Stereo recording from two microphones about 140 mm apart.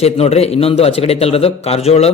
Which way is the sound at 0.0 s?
45° left (ahead or behind).